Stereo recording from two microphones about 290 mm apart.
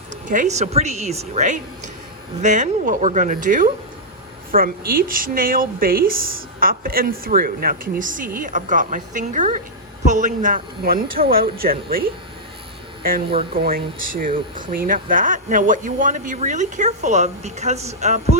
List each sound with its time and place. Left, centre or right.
0.3 s a man's voice: right